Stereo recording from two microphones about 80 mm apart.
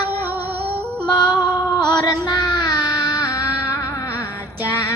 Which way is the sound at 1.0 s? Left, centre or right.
Left.